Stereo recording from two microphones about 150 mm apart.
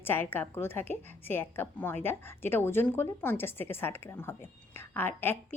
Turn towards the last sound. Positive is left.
turn(degrees=15)  # may be behind; listen again after turning